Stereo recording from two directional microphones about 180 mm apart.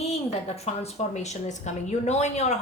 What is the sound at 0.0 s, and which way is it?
A woman's voice, 35° left (ahead or behind).